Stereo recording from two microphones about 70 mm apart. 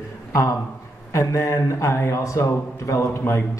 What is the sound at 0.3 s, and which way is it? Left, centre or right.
Speech, left.